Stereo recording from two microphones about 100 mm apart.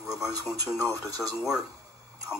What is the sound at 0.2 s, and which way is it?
Speech, 35° right (ahead or behind).